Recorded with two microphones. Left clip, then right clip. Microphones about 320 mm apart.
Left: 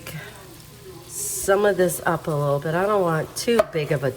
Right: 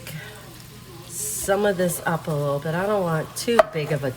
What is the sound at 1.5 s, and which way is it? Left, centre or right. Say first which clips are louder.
Speech: left 3 dB; centre.